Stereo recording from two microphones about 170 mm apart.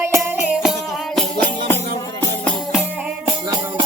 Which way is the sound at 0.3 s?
5° right (ahead or behind).